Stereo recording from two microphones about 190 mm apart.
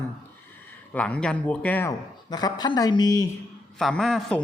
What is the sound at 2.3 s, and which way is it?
A man's voice, 20° left (ahead or behind).